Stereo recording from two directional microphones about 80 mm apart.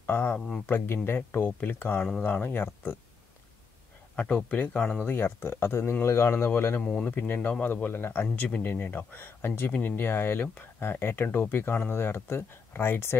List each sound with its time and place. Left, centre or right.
0.0 s speech: left
4.1 s speech: centre; by 6.8 s left
6.8 s speech: centre
7.1 s speech: left